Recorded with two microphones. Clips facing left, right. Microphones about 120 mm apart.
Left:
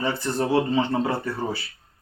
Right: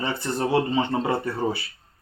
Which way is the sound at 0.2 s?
20° right (ahead or behind).